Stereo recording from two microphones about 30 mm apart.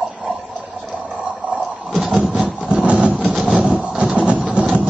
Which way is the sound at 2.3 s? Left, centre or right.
Right.